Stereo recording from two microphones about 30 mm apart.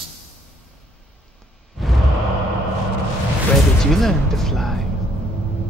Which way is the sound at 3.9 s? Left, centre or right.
Centre.